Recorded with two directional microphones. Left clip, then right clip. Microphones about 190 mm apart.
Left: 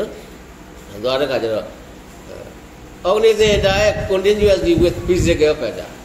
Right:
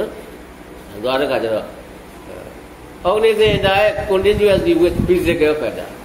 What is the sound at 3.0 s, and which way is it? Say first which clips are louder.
A man's voice: even; 45° left (ahead or behind).